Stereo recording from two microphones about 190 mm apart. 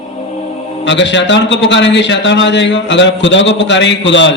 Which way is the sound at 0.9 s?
70° left (ahead or behind).